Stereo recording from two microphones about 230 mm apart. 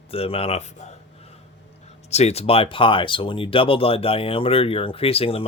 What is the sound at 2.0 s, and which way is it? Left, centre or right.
Speech, left.